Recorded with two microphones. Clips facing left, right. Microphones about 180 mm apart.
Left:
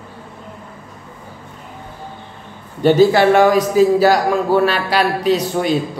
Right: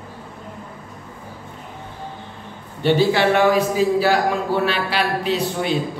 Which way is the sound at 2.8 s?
45° left (ahead or behind).